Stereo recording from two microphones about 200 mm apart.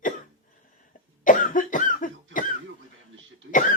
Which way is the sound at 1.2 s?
40° left (ahead or behind).